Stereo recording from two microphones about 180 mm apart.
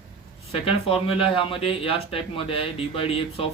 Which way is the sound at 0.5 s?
30° left (ahead or behind).